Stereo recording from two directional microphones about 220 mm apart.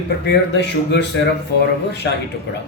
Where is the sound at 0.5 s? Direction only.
50° left (ahead or behind).